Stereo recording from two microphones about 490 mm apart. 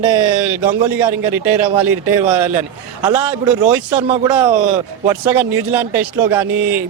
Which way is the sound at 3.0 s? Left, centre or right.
Centre.